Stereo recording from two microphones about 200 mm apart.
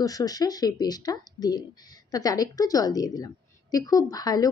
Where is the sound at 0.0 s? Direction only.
20° left (ahead or behind).